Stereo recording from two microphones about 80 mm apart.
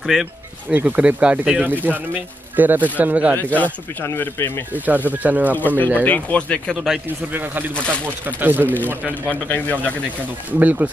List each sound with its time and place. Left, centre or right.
0.2 s speech: centre
3.3 s speech: left
4.1 s speech: left
4.7 s speech: right
5.5 s speech: left
7.3 s speech: right
8.6 s speech: left
10.6 s speech: centre